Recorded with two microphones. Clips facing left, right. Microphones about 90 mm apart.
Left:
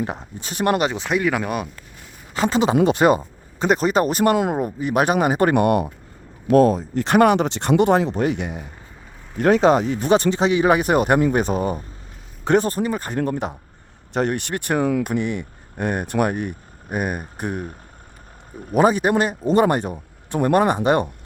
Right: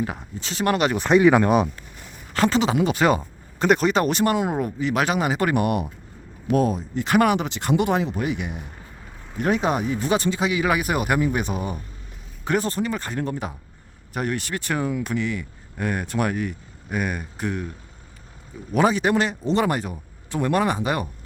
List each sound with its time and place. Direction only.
0.0 s speech: 25° left (ahead or behind)
0.3 s speech: 45° left (ahead or behind)
1.0 s speech: centre (ahead or behind)
2.5 s speech: 20° left (ahead or behind)
3.2 s a sound: centre (ahead or behind)
3.8 s a man's voice: 35° left (ahead or behind)
9.6 s speech: 85° left
10.1 s a man's voice: 25° left (ahead or behind)
13.1 s speech: 55° left (ahead or behind)
18.7 s a man's voice: 40° left (ahead or behind); by 20.4 s 25° left (ahead or behind)
20.4 s speech: 45° left (ahead or behind)
20.8 s speech: 25° left (ahead or behind)